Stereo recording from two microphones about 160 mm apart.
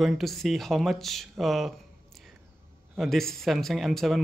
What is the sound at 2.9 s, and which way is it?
Speech, centre (ahead or behind).